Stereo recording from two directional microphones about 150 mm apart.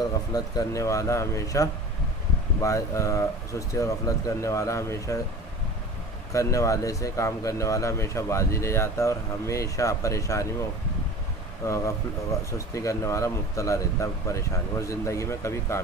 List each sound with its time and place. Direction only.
0.3 s speech: 25° left (ahead or behind)
6.3 s speech: 20° left (ahead or behind)
11.6 s speech: 20° left (ahead or behind)